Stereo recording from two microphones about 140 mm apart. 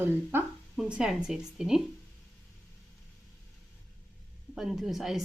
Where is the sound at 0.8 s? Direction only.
5° right (ahead or behind).